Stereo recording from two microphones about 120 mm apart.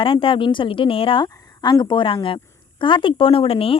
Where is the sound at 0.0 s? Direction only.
45° left (ahead or behind).